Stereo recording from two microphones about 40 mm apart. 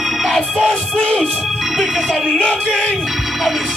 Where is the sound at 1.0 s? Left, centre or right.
Left.